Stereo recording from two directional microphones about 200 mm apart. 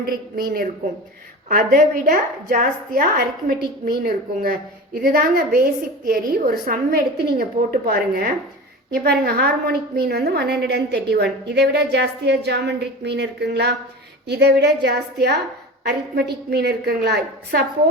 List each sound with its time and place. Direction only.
0.3 s a woman's voice: 45° right (ahead or behind)